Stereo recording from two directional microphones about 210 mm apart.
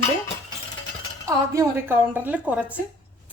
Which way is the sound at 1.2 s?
15° right (ahead or behind).